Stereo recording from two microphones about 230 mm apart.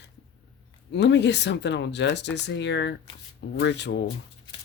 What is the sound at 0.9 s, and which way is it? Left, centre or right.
Speech, left.